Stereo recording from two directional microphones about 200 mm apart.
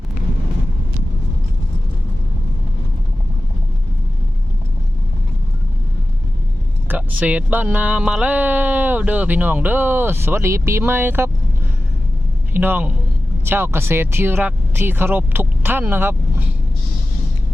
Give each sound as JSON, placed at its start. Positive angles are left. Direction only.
{"t": 6.8, "sound": "speech", "side_deg": -10}
{"t": 12.5, "sound": "speech", "side_deg": -10}